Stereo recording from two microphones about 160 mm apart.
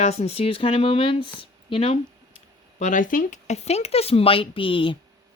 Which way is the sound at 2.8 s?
50° left (ahead or behind).